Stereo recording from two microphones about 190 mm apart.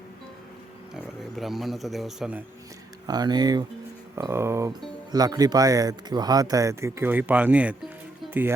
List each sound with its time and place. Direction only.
1.2 s speech: centre (ahead or behind)
3.1 s speech: 20° right (ahead or behind)